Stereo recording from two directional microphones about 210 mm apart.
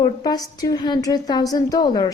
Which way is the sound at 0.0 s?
20° left (ahead or behind).